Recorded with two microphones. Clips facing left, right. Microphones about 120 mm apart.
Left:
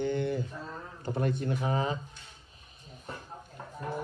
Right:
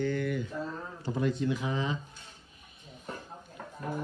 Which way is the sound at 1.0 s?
55° left (ahead or behind).